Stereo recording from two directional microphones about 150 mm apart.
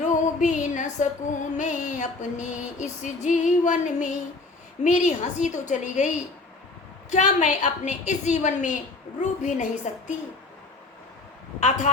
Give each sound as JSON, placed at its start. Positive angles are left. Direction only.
{"t": 0.0, "sound": "music", "side_deg": 55}